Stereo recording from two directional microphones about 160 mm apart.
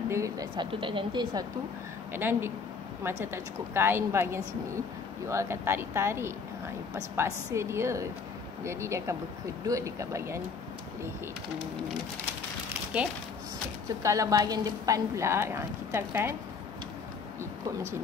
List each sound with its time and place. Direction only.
0.1 s speech: 20° right (ahead or behind)
0.7 s speech: 30° right (ahead or behind)
2.1 s a woman's voice: 15° right (ahead or behind)
13.8 s a woman's voice: 20° right (ahead or behind)